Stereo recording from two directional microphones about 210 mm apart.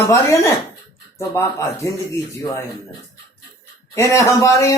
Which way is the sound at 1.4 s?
15° left (ahead or behind).